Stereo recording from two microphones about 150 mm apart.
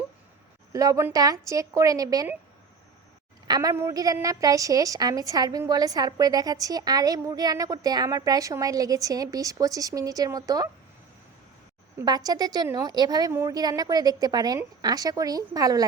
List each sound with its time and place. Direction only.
0.7 s a woman's voice: 20° right (ahead or behind)
3.4 s a woman's voice: 25° right (ahead or behind)
11.9 s a woman's voice: 25° right (ahead or behind)